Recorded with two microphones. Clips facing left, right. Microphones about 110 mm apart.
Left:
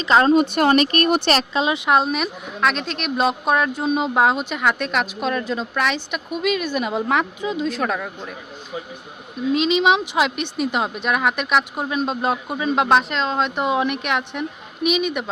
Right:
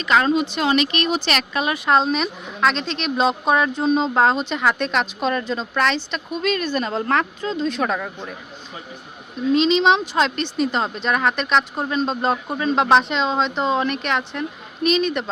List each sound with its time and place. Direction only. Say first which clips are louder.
0.0 s a woman's voice: left 3 dB; 30° left (ahead or behind)
0.4 s speech: left 3 dB; 55° left (ahead or behind)
1.5 s speech: left 2 dB; 20° left (ahead or behind)
1.9 s a woman's voice: right 3 dB; 5° left (ahead or behind)
9.5 s a woman's voice: right 1 dB; 5° left (ahead or behind)